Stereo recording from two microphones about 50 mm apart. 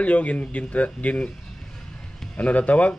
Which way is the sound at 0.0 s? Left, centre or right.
Left.